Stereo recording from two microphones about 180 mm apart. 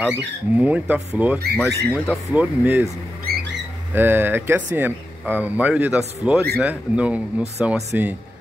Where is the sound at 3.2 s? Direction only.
65° right (ahead or behind).